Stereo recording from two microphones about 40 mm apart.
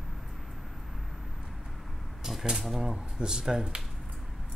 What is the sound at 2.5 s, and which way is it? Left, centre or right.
Speech, centre.